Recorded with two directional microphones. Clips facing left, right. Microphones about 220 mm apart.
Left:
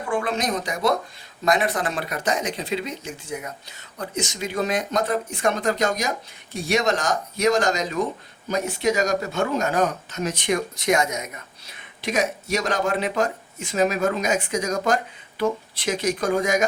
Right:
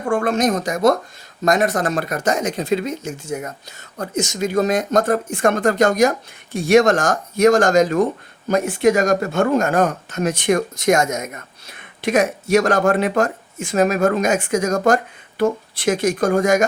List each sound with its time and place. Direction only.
0.0 s speech: 45° right (ahead or behind)